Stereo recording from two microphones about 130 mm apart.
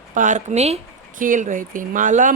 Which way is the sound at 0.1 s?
85° right.